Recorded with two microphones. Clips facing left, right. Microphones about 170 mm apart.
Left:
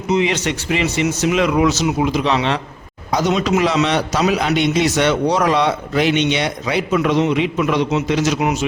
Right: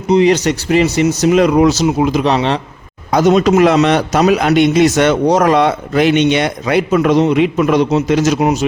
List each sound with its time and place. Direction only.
0.1 s speech: 40° right (ahead or behind)
3.1 s a man's voice: 50° right (ahead or behind)